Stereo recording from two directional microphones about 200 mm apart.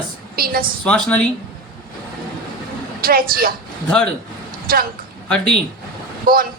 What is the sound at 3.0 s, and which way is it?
Speech, 45° right (ahead or behind).